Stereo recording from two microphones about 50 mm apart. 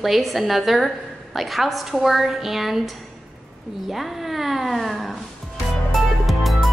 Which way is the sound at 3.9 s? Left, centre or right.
Centre.